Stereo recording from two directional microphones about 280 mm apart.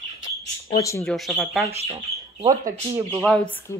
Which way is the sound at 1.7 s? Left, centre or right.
Right.